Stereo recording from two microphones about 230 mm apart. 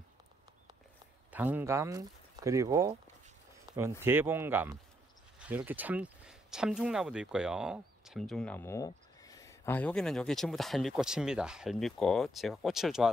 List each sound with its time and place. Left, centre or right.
1.3 s speech: centre
4.0 s speech: centre